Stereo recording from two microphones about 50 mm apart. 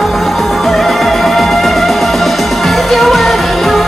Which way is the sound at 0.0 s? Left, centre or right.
Centre.